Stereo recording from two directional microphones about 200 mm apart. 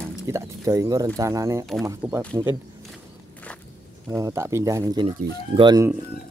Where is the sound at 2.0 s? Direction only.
5° right (ahead or behind).